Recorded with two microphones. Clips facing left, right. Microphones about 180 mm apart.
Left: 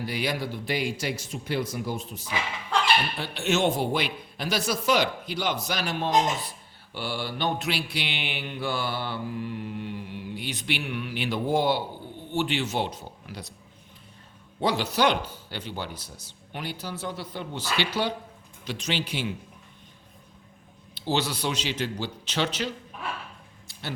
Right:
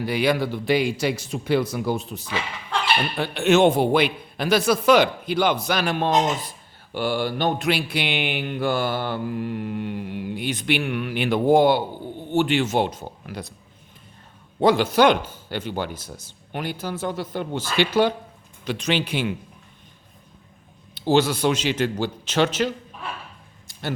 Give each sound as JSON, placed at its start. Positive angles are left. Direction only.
{"t": 0.0, "sound": "a man's voice", "side_deg": -65}
{"t": 6.9, "sound": "mantra", "side_deg": -50}
{"t": 14.6, "sound": "mantra", "side_deg": -50}
{"t": 18.6, "sound": "a man's voice", "side_deg": -55}
{"t": 20.9, "sound": "mantra", "side_deg": -50}